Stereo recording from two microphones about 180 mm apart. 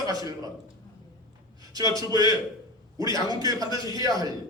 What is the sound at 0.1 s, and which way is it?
Speech, 20° right (ahead or behind).